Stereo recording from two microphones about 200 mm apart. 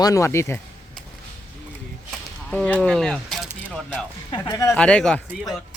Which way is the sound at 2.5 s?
5° left (ahead or behind).